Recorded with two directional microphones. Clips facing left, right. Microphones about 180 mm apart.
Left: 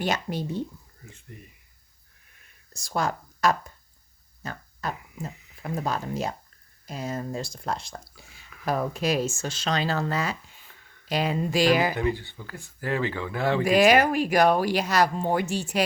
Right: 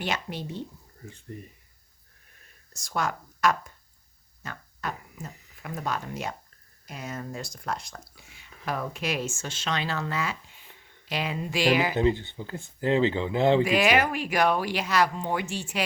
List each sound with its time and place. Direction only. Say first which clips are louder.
0.0 s speech: left 4 dB; 40° left (ahead or behind)
1.3 s speech: right 6 dB; 35° right (ahead or behind)
2.7 s speech: left 2 dB; 30° left (ahead or behind)
4.4 s a sound: left 2 dB; 35° left (ahead or behind)
5.2 s speech: left 6 dB; 35° left (ahead or behind)
11.9 s speech: right 3 dB; 20° right (ahead or behind)
13.7 s speech: left 4 dB; 40° left (ahead or behind)